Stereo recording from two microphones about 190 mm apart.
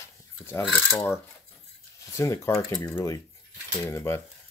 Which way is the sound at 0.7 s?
5° left (ahead or behind).